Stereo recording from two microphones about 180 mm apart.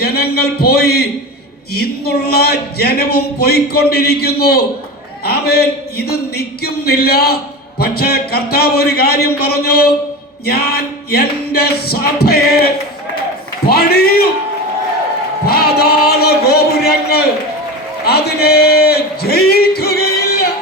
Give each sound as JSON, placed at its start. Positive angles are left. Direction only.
{"t": 0.0, "sound": "speech", "side_deg": 60}
{"t": 13.7, "sound": "speech", "side_deg": 60}
{"t": 15.4, "sound": "a sound", "side_deg": 60}